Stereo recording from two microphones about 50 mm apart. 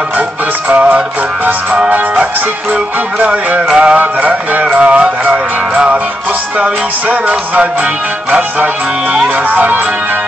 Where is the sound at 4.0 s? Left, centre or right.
Right.